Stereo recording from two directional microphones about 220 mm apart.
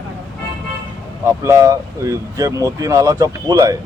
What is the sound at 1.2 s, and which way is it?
Speech, 10° right (ahead or behind).